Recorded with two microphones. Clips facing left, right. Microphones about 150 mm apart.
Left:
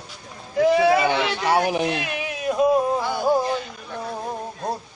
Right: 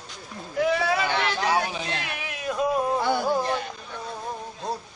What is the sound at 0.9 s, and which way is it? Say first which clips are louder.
Speech: left 4 dB; 65° left (ahead or behind).